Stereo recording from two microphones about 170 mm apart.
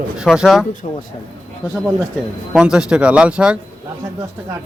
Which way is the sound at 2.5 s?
5° right (ahead or behind).